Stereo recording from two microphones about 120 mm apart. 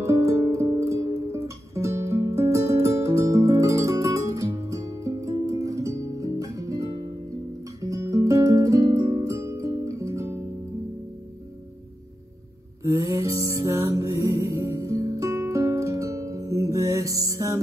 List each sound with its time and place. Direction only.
0.0 s music: 25° right (ahead or behind)
12.8 s music: 25° right (ahead or behind)